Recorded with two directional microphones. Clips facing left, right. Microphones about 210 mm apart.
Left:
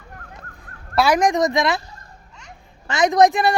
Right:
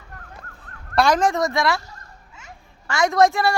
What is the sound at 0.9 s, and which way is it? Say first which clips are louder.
Speech: left 1 dB; 10° left (ahead or behind).